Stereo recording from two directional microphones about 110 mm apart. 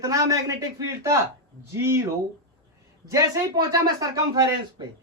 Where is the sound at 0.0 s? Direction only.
30° right (ahead or behind).